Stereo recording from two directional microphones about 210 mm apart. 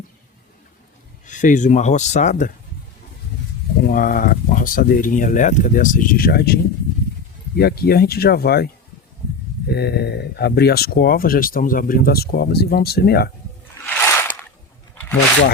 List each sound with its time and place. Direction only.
1.2 s speech: 35° left (ahead or behind)
3.8 s speech: 45° left (ahead or behind)
13.8 s a sound: 10° left (ahead or behind)